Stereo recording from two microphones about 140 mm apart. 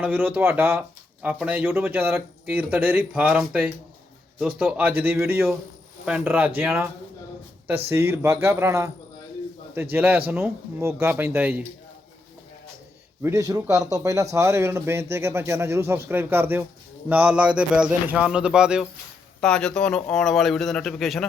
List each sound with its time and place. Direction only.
0.0 s speech: 10° right (ahead or behind)
7.7 s speech: 15° right (ahead or behind)
9.9 s speech: 15° right (ahead or behind)
13.2 s speech: 25° right (ahead or behind); by 18.9 s 5° right (ahead or behind)
19.4 s speech: 5° left (ahead or behind)